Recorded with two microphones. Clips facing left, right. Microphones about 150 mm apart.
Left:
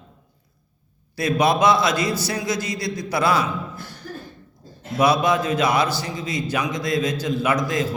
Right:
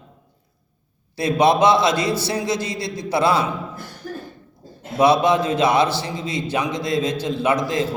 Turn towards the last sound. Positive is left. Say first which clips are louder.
# right 2 dB
turn(degrees=-30)  # may be behind; listen again after turning